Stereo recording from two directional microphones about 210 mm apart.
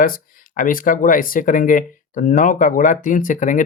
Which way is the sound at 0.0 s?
40° left (ahead or behind).